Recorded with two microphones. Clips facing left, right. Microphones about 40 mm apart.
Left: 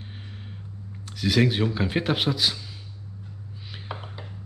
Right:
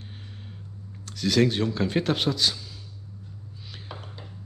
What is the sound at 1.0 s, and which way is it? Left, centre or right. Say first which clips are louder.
Speech: even; centre.